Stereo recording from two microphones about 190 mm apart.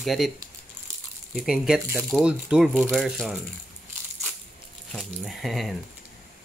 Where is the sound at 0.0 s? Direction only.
Centre (ahead or behind).